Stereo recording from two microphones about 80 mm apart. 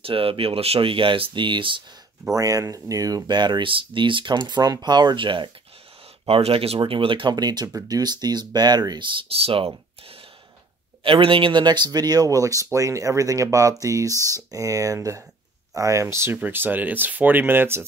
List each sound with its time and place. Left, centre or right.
0.1 s speech: right
2.3 s speech: right
3.3 s speech: right
6.8 s speech: right
11.1 s speech: right
16.3 s speech: right